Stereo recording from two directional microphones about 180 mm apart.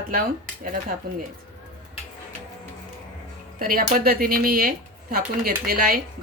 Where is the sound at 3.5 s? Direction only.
50° right (ahead or behind).